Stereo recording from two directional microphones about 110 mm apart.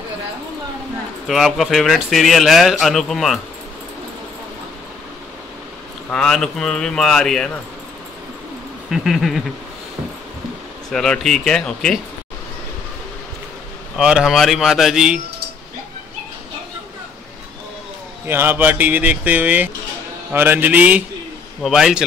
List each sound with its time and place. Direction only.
1.2 s speech: centre (ahead or behind)
6.0 s speech: 5° left (ahead or behind)
8.9 s speech: centre (ahead or behind)
10.9 s speech: 5° left (ahead or behind)
13.9 s speech: 5° right (ahead or behind)
18.2 s speech: 20° right (ahead or behind)
21.6 s speech: 5° right (ahead or behind)